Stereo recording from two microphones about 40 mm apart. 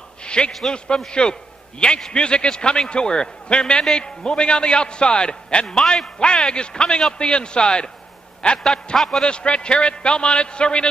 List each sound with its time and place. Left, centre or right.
0.2 s a sound: left
0.5 s a man's voice: centre
0.8 s a man's voice: left
8.9 s a man's voice: centre
9.2 s a man's voice: left